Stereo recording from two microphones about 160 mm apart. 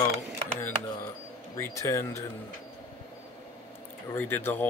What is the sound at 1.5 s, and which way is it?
Speech, 20° left (ahead or behind).